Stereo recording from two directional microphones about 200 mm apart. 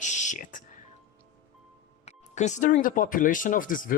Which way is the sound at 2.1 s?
35° left (ahead or behind).